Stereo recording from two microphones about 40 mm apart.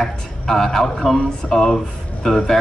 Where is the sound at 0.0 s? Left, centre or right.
Centre.